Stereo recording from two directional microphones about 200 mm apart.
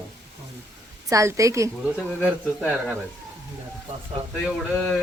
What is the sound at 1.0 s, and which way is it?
Speech, 15° right (ahead or behind).